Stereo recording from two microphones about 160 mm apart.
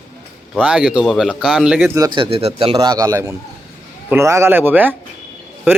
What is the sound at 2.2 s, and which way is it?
A man's voice, 35° right (ahead or behind).